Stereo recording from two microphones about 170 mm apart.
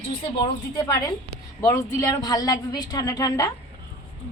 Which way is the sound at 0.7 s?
20° left (ahead or behind).